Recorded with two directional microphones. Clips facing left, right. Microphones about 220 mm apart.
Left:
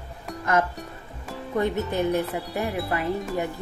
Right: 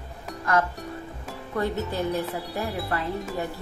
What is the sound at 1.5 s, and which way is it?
Speech, 20° left (ahead or behind).